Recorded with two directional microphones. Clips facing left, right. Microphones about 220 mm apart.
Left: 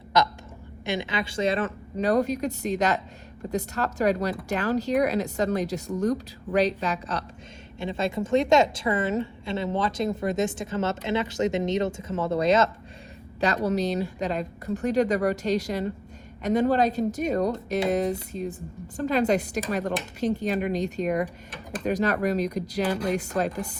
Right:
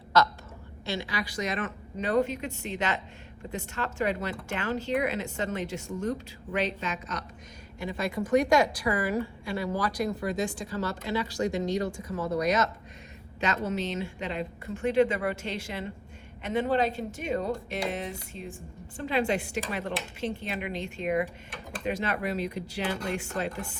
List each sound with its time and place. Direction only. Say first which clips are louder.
0.1 s a woman's voice: left 1 dB; 15° left (ahead or behind)
13.7 s speech: left 6 dB; 35° left (ahead or behind)